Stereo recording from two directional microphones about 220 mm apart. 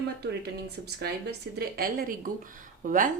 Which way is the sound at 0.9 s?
50° right (ahead or behind).